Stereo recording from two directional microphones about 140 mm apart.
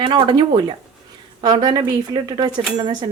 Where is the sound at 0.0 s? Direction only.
35° right (ahead or behind).